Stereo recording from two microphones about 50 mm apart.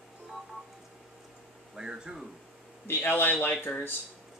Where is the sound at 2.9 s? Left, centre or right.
Left.